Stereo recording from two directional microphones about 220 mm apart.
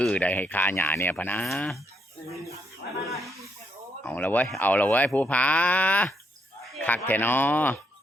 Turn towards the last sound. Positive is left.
turn(degrees=10)  # may be behind; listen again after turning